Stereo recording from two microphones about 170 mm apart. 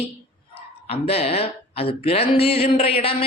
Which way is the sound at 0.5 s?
35° left (ahead or behind).